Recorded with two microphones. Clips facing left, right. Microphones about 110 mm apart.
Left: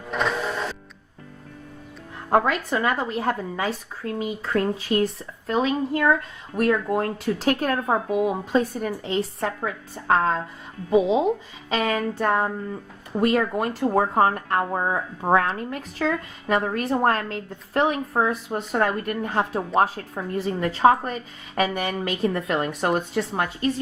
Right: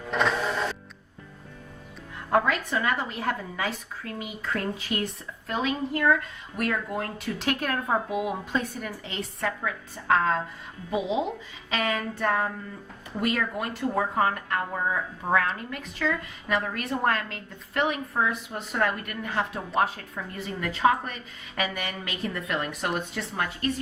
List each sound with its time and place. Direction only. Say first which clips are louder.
0.1 s music: even; 5° left (ahead or behind)
2.3 s speech: left 3 dB; 35° left (ahead or behind)